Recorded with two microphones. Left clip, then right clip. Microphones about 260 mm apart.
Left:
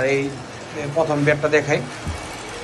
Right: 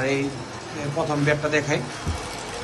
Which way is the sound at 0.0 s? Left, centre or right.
Centre.